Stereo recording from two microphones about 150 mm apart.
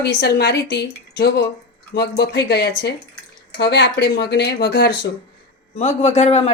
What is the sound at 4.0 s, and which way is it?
Speech, 90° left.